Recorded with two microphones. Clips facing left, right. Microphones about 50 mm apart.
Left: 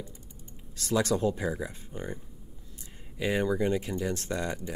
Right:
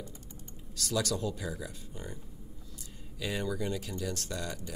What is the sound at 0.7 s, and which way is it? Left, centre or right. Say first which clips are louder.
Speech: left 5 dB; left.